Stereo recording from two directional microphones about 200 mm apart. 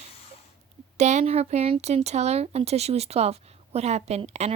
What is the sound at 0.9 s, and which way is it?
Speech, 35° right (ahead or behind).